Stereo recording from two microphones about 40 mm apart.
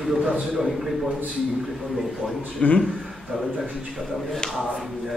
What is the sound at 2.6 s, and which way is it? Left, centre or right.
Speech, left.